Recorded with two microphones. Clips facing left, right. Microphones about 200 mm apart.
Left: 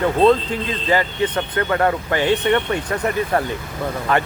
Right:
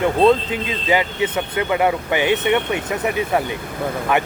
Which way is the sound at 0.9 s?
10° right (ahead or behind).